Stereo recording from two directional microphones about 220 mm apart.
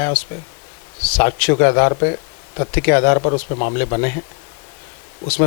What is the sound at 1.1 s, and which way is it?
Speech, 15° left (ahead or behind).